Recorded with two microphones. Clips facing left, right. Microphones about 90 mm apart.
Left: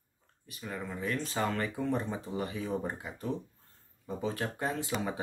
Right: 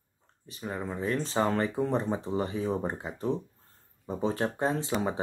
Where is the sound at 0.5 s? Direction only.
30° right (ahead or behind).